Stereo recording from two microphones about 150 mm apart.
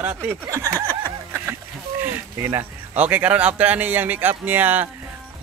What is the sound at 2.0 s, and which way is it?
Speech, 15° right (ahead or behind).